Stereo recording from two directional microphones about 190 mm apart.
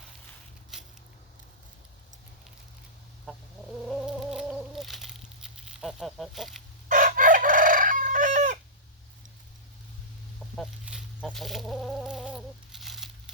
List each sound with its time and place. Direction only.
3.3 s chicken: 5° left (ahead or behind)
3.8 s a sound: centre (ahead or behind)
6.8 s chicken: 45° right (ahead or behind)
10.6 s chicken: centre (ahead or behind)